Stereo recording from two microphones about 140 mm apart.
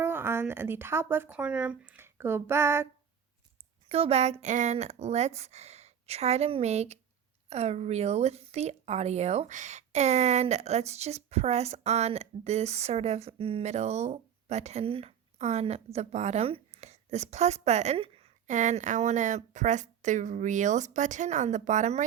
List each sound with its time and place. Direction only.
0.0 s speech: 15° right (ahead or behind)
3.8 s speech: 45° right (ahead or behind)
18.4 s speech: 60° right (ahead or behind)